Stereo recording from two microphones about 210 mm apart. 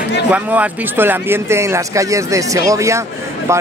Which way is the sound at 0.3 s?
5° right (ahead or behind).